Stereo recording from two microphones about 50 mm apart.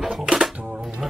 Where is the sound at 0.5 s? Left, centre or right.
Right.